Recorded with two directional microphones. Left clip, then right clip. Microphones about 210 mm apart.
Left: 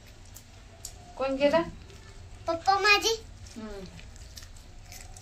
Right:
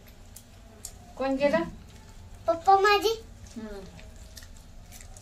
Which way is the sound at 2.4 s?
25° right (ahead or behind).